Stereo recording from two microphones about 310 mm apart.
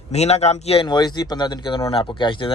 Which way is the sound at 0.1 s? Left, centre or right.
Left.